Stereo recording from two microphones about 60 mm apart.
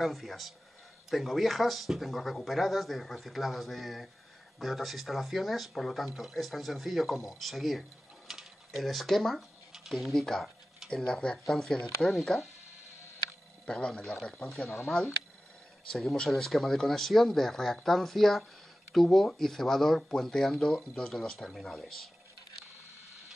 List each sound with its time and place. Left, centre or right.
0.0 s speech: centre
13.7 s speech: centre
14.4 s speech: centre